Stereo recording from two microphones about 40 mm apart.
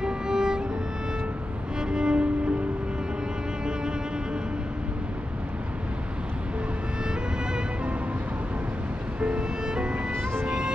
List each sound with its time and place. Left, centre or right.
0.0 s music: centre
1.8 s music: right
9.2 s music: right